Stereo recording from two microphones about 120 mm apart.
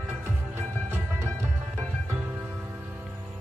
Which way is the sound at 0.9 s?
20° right (ahead or behind).